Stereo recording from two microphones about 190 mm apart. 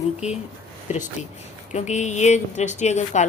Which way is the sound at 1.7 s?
40° left (ahead or behind).